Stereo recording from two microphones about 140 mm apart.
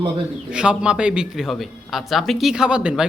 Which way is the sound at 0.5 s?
5° right (ahead or behind).